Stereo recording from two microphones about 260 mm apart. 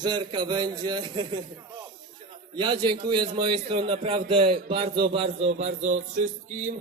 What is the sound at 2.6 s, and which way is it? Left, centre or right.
A man's voice, centre.